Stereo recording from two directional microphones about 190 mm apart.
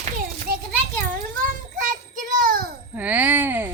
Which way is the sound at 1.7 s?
45° right (ahead or behind).